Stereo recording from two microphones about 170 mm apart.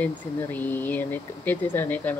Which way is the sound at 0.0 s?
10° left (ahead or behind).